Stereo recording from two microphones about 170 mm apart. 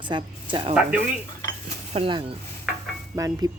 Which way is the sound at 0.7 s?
5° right (ahead or behind).